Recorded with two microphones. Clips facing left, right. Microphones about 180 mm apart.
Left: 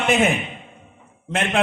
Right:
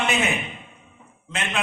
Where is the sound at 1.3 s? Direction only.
55° left (ahead or behind).